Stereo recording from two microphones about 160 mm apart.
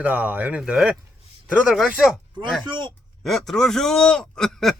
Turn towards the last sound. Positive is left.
turn(degrees=0)  # may be behind; listen again after turning